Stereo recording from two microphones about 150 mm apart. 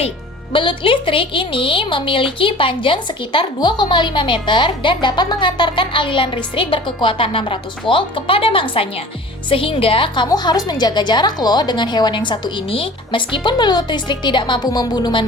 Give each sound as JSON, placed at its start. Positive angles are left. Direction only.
{"t": 0.5, "sound": "a woman's voice", "side_deg": 35}